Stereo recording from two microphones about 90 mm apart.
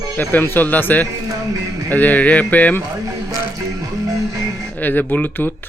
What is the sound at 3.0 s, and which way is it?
Music, 40° right (ahead or behind).